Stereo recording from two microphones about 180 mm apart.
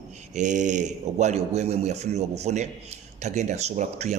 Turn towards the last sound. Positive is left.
turn(degrees=-40)  # may be behind; listen again after turning